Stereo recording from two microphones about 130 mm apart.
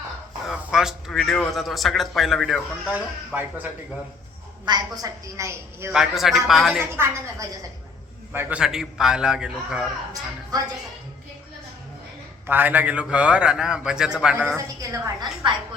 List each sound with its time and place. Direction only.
0.5 s a man's voice: 5° right (ahead or behind)
2.9 s a man's voice: 15° right (ahead or behind)
4.6 s a woman's voice: 30° right (ahead or behind)
5.9 s a man's voice: 5° right (ahead or behind)
6.9 s a woman's voice: 20° right (ahead or behind)
12.5 s a man's voice: 15° right (ahead or behind)
14.5 s a woman's voice: 25° right (ahead or behind)